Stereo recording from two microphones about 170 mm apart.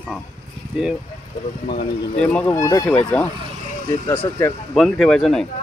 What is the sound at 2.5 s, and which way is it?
Speech, 15° left (ahead or behind).